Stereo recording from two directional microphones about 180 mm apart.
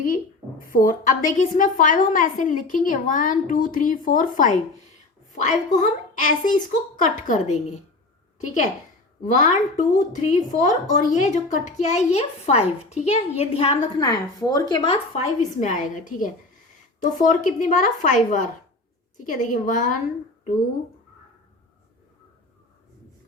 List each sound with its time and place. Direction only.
0.7 s a woman's voice: 50° left (ahead or behind); by 14.1 s 35° left (ahead or behind)
14.1 s a woman's voice: 20° left (ahead or behind); by 20.0 s 45° left (ahead or behind)